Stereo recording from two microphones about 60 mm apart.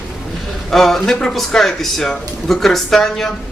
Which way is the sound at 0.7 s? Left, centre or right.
Centre.